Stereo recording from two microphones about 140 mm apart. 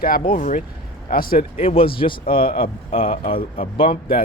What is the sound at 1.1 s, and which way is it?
Speech, 90° left.